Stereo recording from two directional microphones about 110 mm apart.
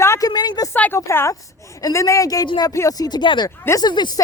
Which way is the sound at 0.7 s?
20° left (ahead or behind).